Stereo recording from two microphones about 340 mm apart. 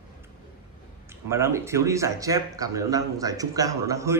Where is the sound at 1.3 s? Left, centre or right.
Centre.